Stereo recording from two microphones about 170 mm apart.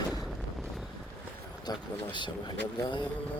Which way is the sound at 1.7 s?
25° left (ahead or behind).